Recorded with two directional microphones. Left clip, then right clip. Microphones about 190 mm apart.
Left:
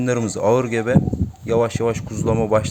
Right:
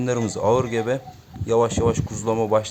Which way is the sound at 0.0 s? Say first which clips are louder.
Left 3 dB; 15° left (ahead or behind).